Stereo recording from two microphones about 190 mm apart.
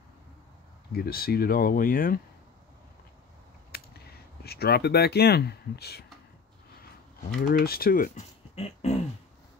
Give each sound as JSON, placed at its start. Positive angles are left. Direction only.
{"t": 0.9, "sound": "speech", "side_deg": 50}
{"t": 3.7, "sound": "a sound", "side_deg": 55}
{"t": 4.4, "sound": "speech", "side_deg": 55}
{"t": 7.3, "sound": "speech", "side_deg": 50}